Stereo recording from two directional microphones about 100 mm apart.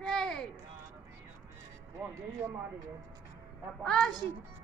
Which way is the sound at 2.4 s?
30° right (ahead or behind).